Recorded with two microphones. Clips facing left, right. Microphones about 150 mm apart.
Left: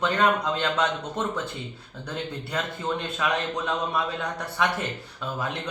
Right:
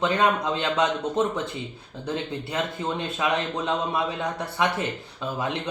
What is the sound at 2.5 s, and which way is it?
A man's voice, 20° right (ahead or behind).